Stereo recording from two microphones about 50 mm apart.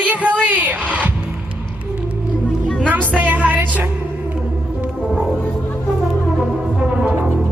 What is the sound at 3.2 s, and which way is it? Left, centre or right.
Music, right.